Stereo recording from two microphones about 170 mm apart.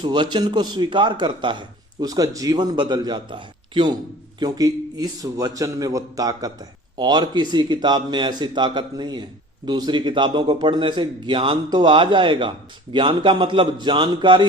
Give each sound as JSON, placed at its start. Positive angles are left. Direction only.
{"t": 0.0, "sound": "a man's voice", "side_deg": -25}